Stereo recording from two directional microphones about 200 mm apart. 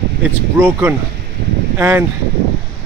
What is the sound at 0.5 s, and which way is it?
Speech, 10° right (ahead or behind).